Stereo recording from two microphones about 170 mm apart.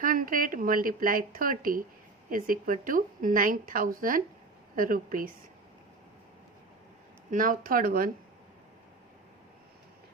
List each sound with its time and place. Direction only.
0.0 s a woman's voice: 55° right (ahead or behind)
7.3 s a woman's voice: 50° right (ahead or behind)